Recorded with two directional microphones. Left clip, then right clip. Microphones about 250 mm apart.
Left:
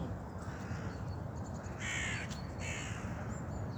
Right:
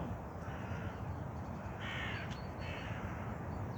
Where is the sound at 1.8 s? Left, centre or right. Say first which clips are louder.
Left 4 dB; left.